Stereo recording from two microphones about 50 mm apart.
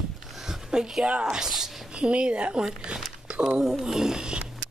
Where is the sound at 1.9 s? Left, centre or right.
Centre.